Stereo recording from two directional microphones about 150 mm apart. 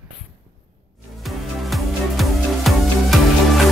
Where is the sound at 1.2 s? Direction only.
Centre (ahead or behind).